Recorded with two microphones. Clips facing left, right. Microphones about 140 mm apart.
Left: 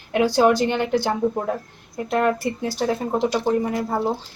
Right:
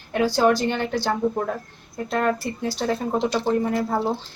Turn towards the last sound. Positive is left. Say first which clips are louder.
# even
turn(degrees=15)  # may be behind; listen again after turning